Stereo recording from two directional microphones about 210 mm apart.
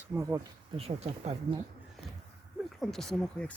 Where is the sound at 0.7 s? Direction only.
30° right (ahead or behind).